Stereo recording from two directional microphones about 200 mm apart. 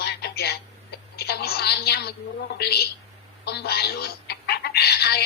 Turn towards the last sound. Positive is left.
turn(degrees=55)  # may be behind; listen again after turning